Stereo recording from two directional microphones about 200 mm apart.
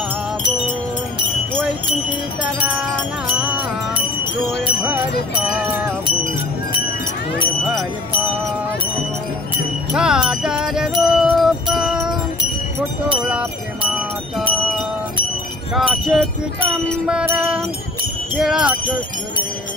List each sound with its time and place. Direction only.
3.3 s wind chime: 5° right (ahead or behind)
4.6 s jingle bell: 5° right (ahead or behind)
9.9 s wind chime: 5° right (ahead or behind)
13.3 s music: 5° right (ahead or behind)
15.7 s music: centre (ahead or behind)